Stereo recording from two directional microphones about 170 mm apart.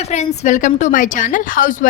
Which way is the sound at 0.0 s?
45° left (ahead or behind).